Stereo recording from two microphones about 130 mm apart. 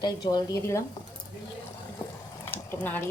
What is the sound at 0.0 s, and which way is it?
Speech, 30° left (ahead or behind).